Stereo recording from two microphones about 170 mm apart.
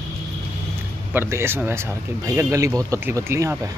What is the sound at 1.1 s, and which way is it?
Speech, 15° right (ahead or behind).